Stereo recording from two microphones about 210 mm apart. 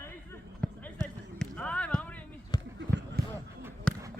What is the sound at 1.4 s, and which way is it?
Basketball bounce, 5° left (ahead or behind).